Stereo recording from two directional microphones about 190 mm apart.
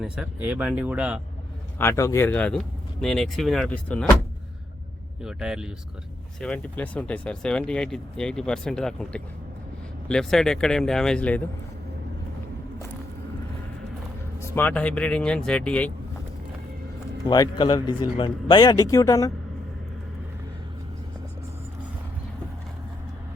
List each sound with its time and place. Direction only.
0.0 s speech: 5° right (ahead or behind)
1.8 s speech: 15° left (ahead or behind)
5.2 s speech: 5° right (ahead or behind)
14.4 s speech: 10° left (ahead or behind)
17.2 s speech: 20° left (ahead or behind)